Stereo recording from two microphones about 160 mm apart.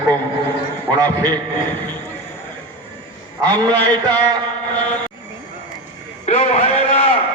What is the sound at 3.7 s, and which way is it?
Speech, 10° left (ahead or behind).